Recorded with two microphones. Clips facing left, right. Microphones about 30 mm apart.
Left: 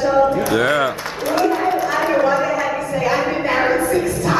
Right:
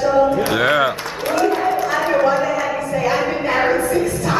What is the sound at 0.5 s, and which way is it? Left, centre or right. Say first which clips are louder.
Music: right 1 dB; centre.